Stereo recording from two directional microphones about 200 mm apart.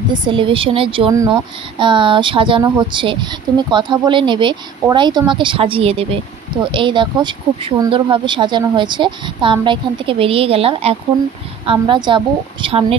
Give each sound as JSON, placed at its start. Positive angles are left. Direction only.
{"t": 0.1, "sound": "a woman's voice", "side_deg": -25}